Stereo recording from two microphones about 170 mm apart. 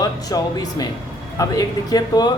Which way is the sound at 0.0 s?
20° left (ahead or behind).